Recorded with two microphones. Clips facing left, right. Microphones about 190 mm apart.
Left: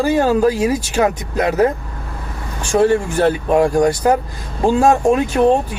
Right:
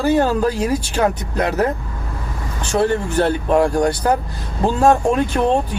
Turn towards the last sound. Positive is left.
turn(degrees=10)  # may be behind; listen again after turning